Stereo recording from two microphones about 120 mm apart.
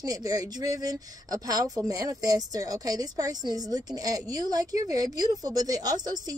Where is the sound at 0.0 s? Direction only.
30° right (ahead or behind).